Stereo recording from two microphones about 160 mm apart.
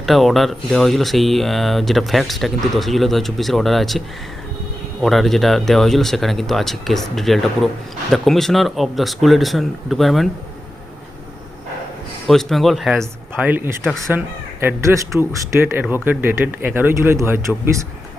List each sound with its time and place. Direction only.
0.0 s speech: centre (ahead or behind)
5.0 s speech: centre (ahead or behind)
12.3 s speech: centre (ahead or behind); by 17.5 s 15° right (ahead or behind)